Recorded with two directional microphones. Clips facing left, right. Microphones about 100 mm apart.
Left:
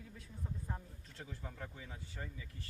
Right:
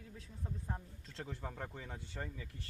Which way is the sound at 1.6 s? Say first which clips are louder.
Right 3 dB; 55° right (ahead or behind).